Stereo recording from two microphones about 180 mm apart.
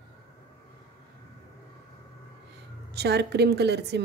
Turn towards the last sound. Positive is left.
turn(degrees=-70)  # may be behind; listen again after turning